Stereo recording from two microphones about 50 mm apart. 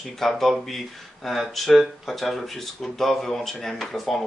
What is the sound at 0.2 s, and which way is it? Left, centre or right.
Speech, centre.